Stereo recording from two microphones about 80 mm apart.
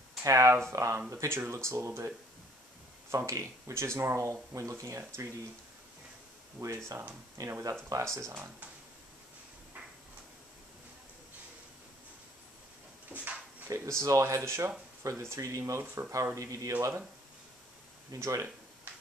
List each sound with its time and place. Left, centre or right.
0.2 s speech: right
6.6 s speech: right
7.3 s speech: right
13.1 s speech: right
13.7 s speech: right
18.1 s speech: right